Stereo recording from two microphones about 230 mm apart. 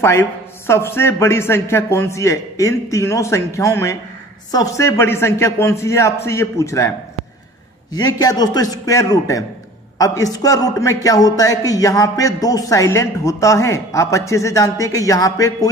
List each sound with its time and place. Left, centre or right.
0.0 s a man's voice: centre
7.9 s a man's voice: centre